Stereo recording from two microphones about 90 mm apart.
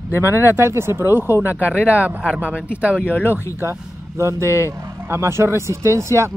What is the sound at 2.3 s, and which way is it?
Speech, 15° right (ahead or behind).